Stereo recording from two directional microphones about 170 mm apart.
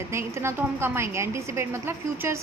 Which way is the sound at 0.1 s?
15° right (ahead or behind).